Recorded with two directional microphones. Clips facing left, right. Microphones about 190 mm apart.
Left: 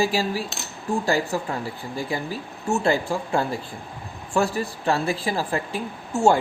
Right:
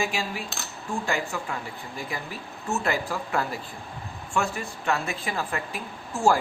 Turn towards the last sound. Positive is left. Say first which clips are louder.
# left 4 dB
turn(degrees=25)  # may be behind; listen again after turning